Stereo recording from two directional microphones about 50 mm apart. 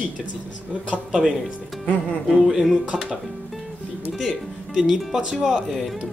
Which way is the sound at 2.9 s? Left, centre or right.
Centre.